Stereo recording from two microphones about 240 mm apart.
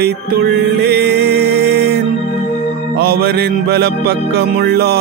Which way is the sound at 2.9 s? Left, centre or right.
Right.